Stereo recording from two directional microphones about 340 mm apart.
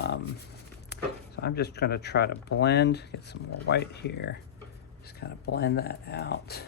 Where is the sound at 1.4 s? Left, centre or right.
Left.